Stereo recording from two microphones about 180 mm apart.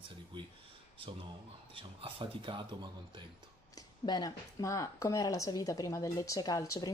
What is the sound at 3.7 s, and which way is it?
Speech, 20° left (ahead or behind).